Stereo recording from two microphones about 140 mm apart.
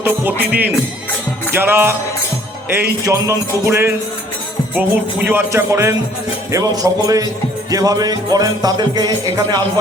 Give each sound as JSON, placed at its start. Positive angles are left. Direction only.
{"t": 0.0, "sound": "music", "side_deg": -15}